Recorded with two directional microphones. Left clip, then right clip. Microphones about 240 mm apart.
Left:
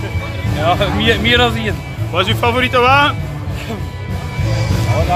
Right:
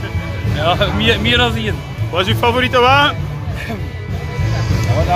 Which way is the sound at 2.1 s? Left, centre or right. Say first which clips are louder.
Even; centre.